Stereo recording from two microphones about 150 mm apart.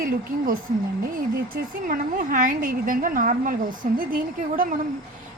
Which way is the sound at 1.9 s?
65° right (ahead or behind).